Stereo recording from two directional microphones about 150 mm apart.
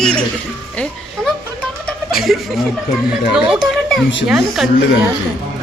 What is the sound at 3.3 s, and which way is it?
Speech, centre (ahead or behind).